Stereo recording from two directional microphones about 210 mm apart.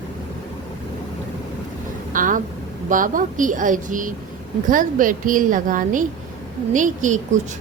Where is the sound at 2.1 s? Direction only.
40° right (ahead or behind).